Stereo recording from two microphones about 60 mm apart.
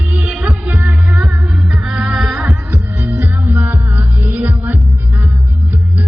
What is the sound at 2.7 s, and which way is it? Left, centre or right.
Music, right.